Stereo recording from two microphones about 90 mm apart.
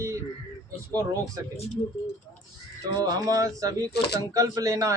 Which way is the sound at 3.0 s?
45° right (ahead or behind).